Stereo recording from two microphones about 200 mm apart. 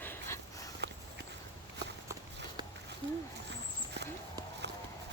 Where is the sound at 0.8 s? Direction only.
55° right (ahead or behind).